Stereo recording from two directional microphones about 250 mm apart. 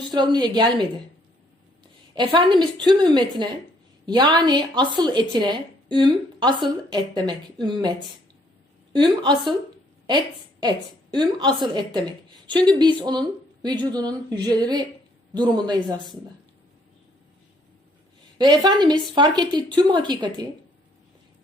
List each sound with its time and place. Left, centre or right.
0.1 s a woman's voice: centre
2.1 s a woman's voice: centre
9.0 s a woman's voice: centre
10.6 s a woman's voice: centre
18.3 s a woman's voice: centre